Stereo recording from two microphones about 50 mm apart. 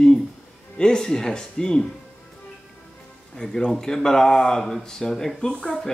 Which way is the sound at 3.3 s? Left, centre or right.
Centre.